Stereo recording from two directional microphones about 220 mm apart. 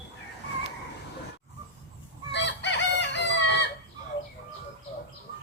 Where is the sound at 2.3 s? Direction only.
55° left (ahead or behind).